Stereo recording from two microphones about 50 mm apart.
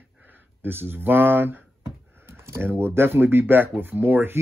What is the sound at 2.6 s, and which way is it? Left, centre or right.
Speech, right.